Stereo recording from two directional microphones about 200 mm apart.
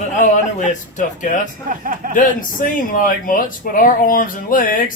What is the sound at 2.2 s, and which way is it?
Speech, 40° left (ahead or behind).